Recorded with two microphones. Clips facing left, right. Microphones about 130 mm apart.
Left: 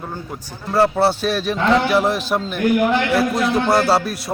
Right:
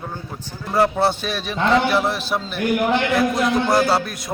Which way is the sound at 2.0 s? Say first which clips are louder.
Left 3 dB; 40° left (ahead or behind).